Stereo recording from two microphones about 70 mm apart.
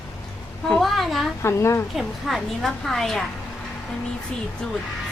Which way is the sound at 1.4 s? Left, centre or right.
Left.